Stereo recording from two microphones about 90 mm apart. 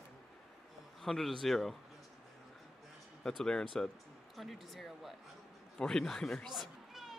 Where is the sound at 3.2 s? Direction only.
5° left (ahead or behind).